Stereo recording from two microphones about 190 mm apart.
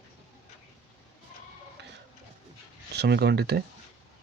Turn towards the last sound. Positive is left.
turn(degrees=-60)  # may be behind; listen again after turning